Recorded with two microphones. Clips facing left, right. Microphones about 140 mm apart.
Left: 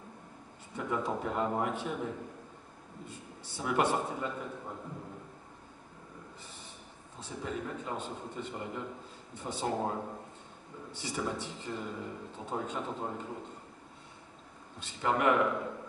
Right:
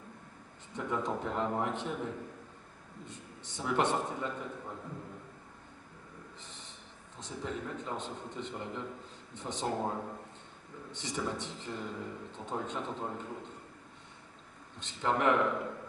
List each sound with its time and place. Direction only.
0.7 s a man's voice: 5° left (ahead or behind)
3.1 s a man's voice: 10° left (ahead or behind)
6.4 s a sound: 10° left (ahead or behind)
7.2 s a man's voice: 5° left (ahead or behind)
14.8 s a man's voice: 5° left (ahead or behind)